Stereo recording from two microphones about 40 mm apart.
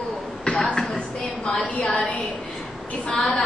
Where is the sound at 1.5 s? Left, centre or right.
Left.